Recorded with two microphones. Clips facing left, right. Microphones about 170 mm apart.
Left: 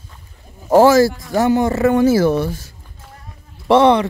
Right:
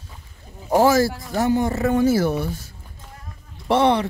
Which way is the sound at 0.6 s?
85° left.